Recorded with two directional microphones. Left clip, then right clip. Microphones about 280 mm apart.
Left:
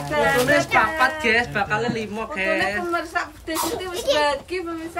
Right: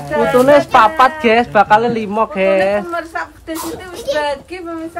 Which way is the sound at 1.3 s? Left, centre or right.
Centre.